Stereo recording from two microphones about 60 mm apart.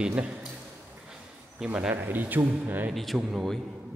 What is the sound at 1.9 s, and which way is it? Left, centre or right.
Speech, right.